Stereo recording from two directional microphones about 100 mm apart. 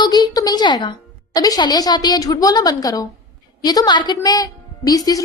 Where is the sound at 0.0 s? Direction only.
45° left (ahead or behind).